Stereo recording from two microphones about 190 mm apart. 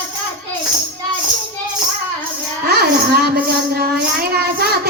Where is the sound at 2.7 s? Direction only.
55° right (ahead or behind).